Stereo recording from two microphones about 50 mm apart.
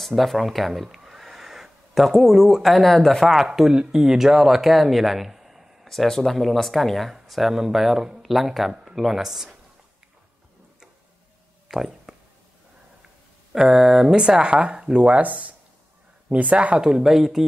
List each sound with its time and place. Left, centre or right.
0.0 s speech: centre
0.9 s a sound: centre
3.3 s speech: centre
5.9 s speech: centre
11.7 s a sound: centre
13.5 s speech: centre
16.8 s speech: centre